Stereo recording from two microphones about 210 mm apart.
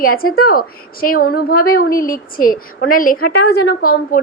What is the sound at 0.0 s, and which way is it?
A woman's voice, 45° left (ahead or behind).